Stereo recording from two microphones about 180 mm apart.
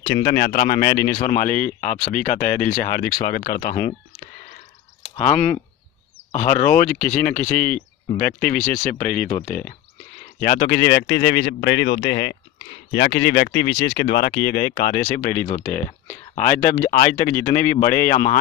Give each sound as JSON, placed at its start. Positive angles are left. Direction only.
{"t": 0.0, "sound": "speech", "side_deg": 60}
{"t": 5.1, "sound": "speech", "side_deg": 40}
{"t": 10.4, "sound": "speech", "side_deg": 60}